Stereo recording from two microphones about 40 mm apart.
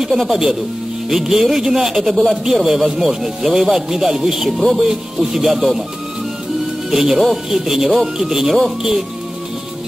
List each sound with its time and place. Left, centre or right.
0.3 s speech: centre
6.9 s speech: centre